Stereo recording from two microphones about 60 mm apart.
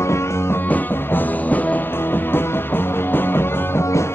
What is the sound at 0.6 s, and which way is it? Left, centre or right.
Music, left.